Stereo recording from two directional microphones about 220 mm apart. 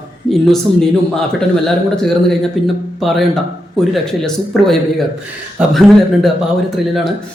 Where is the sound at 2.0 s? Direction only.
Centre (ahead or behind).